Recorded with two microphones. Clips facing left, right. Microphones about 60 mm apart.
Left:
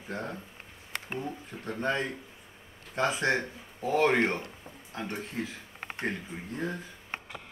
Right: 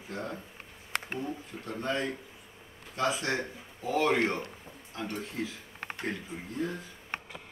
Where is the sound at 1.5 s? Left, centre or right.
Left.